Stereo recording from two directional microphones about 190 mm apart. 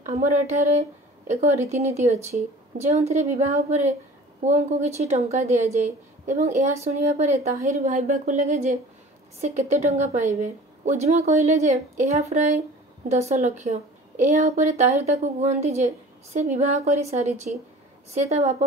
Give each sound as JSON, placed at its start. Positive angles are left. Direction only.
{"t": 0.2, "sound": "a woman's voice", "side_deg": -35}